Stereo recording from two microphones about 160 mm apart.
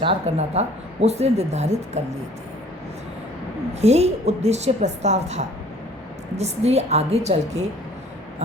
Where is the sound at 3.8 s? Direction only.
40° right (ahead or behind).